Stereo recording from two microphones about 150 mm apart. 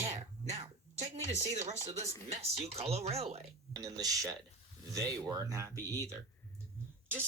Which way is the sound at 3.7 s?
25° right (ahead or behind).